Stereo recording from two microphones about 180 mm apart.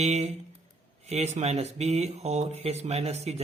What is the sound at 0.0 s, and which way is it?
A man's voice, 35° right (ahead or behind).